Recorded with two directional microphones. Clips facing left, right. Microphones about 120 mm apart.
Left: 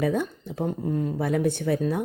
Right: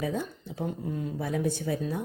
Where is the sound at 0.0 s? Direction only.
65° left (ahead or behind).